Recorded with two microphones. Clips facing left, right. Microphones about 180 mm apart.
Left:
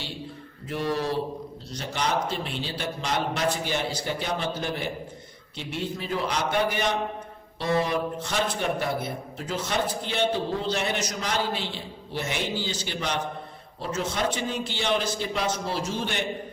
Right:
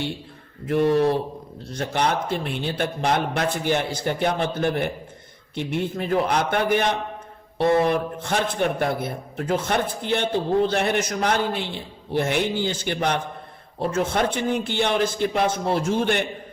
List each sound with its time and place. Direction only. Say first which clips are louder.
0.6 s a man's voice: right 9 dB; 55° right (ahead or behind)